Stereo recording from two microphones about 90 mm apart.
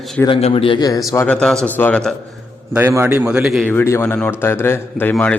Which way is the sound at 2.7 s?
25° right (ahead or behind).